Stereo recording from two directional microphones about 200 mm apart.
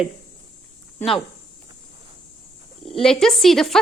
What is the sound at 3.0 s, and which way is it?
Speech, centre (ahead or behind).